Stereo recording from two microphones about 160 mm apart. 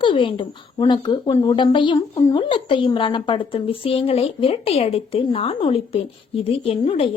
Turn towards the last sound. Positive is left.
turn(degrees=35)  # may be behind; listen again after turning